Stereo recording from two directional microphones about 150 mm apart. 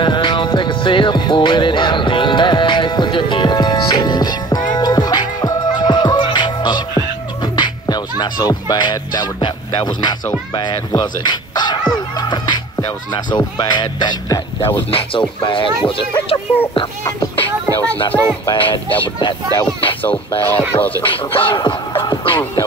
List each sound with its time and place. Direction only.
0.0 s music: 30° left (ahead or behind)
13.1 s speech: 30° left (ahead or behind)
18.1 s speech: 15° left (ahead or behind)
18.5 s speech: 35° left (ahead or behind)
20.0 s speech: 15° left (ahead or behind)
21.4 s speech: 35° left (ahead or behind)
22.0 s music: 30° left (ahead or behind)